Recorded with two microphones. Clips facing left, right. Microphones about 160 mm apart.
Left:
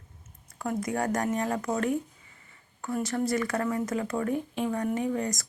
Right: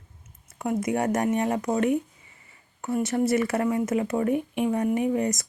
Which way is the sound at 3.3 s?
25° right (ahead or behind).